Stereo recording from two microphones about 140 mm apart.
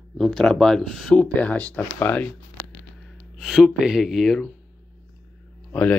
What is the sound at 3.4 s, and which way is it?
Speech, 5° right (ahead or behind).